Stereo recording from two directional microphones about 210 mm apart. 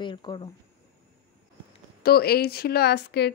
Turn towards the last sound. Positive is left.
turn(degrees=50)  # may be behind; listen again after turning